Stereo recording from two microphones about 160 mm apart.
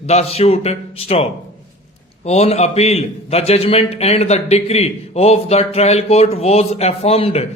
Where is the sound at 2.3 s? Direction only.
40° left (ahead or behind).